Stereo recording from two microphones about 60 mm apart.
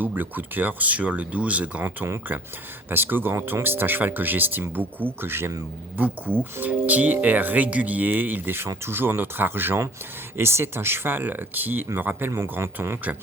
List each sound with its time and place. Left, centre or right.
0.0 s speech: right
2.9 s speech: right
12.3 s speech: right